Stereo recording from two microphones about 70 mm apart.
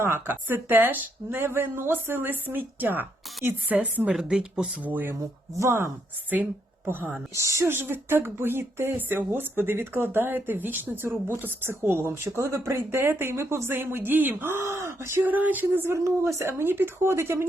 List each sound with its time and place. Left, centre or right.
0.0 s speech: right
3.8 s speech: centre
4.8 s a sound: right
5.5 s speech: right
6.8 s a sound: right
7.3 s speech: right
14.6 s speech: right
15.2 s a sound: right
16.0 s speech: right